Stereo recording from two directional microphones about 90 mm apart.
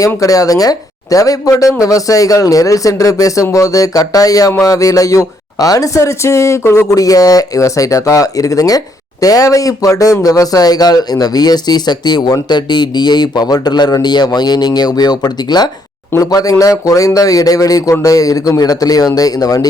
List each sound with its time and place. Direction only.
0.2 s a man's voice: 40° left (ahead or behind)